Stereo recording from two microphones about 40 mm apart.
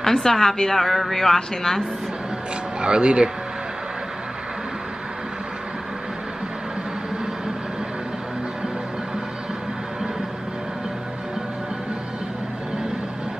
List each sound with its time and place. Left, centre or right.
0.0 s a woman's voice: centre
2.8 s speech: right